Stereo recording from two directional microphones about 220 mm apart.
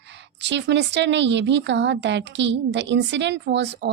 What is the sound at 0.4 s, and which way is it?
A woman's voice, 50° right (ahead or behind).